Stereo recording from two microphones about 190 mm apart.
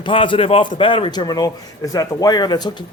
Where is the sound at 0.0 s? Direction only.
25° left (ahead or behind).